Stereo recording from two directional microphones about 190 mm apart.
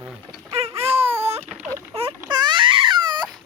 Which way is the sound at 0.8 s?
30° right (ahead or behind).